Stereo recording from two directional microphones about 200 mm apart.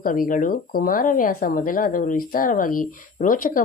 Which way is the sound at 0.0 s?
45° left (ahead or behind).